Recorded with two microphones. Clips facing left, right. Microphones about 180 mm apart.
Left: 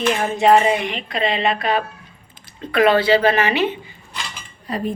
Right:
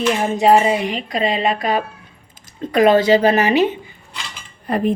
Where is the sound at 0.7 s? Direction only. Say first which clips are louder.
Right 2 dB; 35° right (ahead or behind).